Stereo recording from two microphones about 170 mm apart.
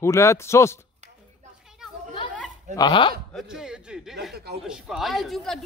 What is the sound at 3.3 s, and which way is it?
Speech, centre (ahead or behind).